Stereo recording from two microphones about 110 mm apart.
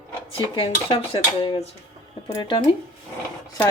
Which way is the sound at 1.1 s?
60° left (ahead or behind).